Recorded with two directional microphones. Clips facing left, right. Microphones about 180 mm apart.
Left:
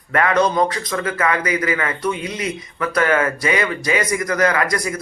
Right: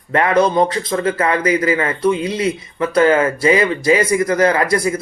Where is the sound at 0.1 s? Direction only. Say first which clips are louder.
Right 3 dB; 25° right (ahead or behind).